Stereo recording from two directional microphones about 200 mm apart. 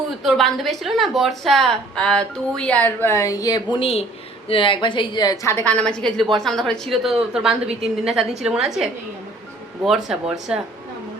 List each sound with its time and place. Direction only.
0.2 s a woman's voice: centre (ahead or behind)